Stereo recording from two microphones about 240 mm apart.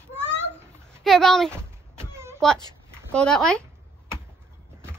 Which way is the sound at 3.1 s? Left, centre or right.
Centre.